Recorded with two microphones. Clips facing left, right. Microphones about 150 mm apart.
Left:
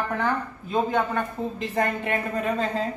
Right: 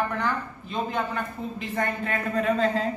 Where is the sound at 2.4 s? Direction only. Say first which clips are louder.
Right 6 dB; 5° left (ahead or behind).